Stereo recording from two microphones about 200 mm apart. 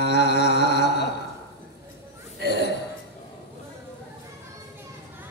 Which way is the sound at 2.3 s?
55° left (ahead or behind).